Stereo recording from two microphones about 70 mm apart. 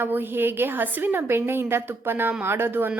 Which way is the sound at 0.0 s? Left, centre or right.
Right.